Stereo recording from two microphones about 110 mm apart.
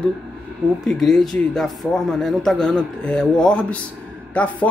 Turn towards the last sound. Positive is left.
turn(degrees=10)  # may be behind; listen again after turning